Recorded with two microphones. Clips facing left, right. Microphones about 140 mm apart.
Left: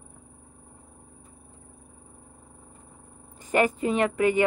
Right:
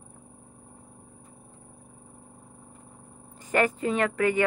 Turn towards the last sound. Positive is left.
turn(degrees=20)  # may be behind; listen again after turning